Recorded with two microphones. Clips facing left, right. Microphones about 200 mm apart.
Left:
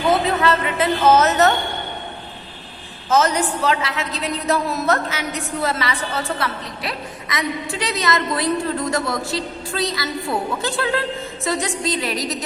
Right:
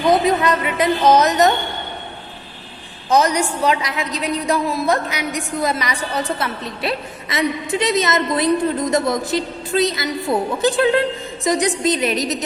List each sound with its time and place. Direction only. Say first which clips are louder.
0.1 s a woman's voice: right 2 dB; 15° right (ahead or behind)
3.1 s a woman's voice: right 1 dB; 15° right (ahead or behind)
11.8 s music: right 4 dB; 20° right (ahead or behind)